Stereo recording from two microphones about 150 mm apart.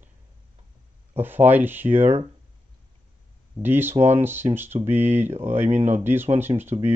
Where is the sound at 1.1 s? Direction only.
15° right (ahead or behind).